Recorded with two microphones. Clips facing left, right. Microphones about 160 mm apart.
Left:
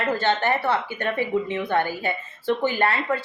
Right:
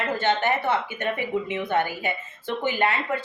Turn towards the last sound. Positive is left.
turn(degrees=-20)  # may be behind; listen again after turning